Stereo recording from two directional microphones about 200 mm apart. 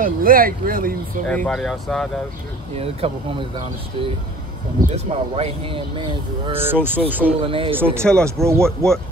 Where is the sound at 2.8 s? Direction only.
30° right (ahead or behind).